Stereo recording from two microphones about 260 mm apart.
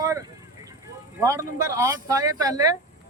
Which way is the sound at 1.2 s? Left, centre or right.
Centre.